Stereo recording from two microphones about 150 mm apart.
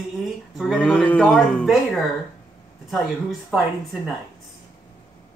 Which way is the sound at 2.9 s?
Centre (ahead or behind).